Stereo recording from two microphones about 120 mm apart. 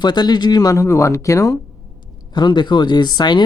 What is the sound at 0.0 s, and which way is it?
Speech, 35° left (ahead or behind).